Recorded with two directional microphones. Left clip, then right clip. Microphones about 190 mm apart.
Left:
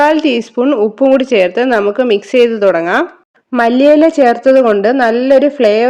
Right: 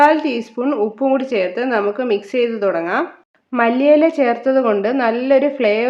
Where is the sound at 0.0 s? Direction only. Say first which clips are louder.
Left 3 dB; 45° left (ahead or behind).